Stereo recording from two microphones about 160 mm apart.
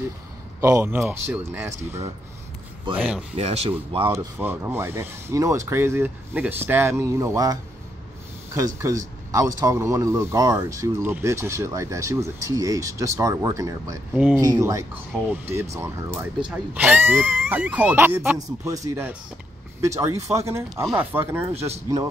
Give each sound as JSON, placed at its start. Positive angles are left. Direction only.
{"t": 0.6, "sound": "speech", "side_deg": -20}
{"t": 3.3, "sound": "speech", "side_deg": -40}
{"t": 4.1, "sound": "speech", "side_deg": -15}
{"t": 8.5, "sound": "speech", "side_deg": -20}
{"t": 20.3, "sound": "speech", "side_deg": -20}